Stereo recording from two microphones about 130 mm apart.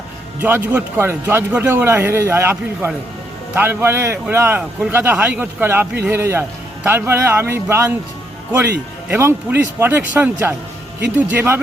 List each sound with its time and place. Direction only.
0.3 s a man's voice: 15° right (ahead or behind)